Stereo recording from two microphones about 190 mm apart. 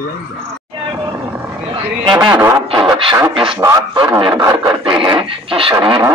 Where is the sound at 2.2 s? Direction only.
15° right (ahead or behind).